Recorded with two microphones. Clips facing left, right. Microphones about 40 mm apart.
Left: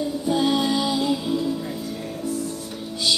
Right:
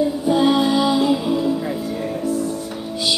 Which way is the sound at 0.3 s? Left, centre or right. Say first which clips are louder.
Right 4 dB; centre.